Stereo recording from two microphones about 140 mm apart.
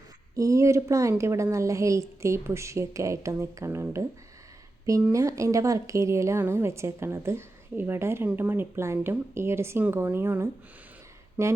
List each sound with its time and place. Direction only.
0.3 s a woman's voice: 20° right (ahead or behind)
5.1 s a woman's voice: 20° right (ahead or behind)